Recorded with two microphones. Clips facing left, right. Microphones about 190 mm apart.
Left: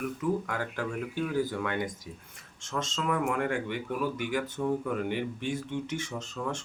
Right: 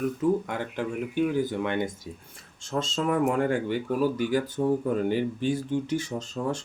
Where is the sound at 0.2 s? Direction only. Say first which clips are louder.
Right 5 dB; 25° right (ahead or behind).